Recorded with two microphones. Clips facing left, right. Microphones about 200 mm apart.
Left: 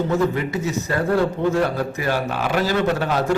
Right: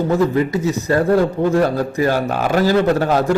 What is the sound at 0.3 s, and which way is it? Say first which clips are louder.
A man's voice: right 6 dB; 35° right (ahead or behind).